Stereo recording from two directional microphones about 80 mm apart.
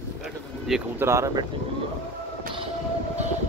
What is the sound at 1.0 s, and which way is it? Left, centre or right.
Speech, right.